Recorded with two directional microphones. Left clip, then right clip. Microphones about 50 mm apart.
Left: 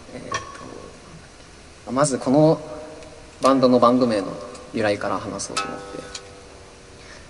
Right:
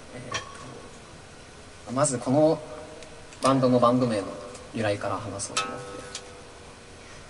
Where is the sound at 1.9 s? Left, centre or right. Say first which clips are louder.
Left 5 dB; left.